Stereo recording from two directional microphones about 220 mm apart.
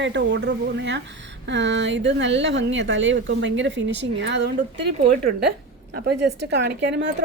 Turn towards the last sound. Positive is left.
turn(degrees=-50)  # may be behind; listen again after turning